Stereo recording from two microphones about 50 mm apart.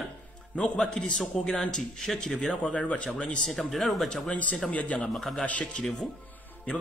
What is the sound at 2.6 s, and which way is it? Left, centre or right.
Speech, left.